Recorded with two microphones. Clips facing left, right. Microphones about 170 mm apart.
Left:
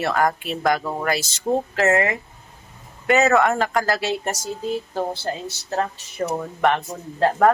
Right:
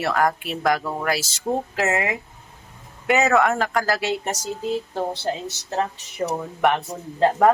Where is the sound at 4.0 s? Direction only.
15° right (ahead or behind).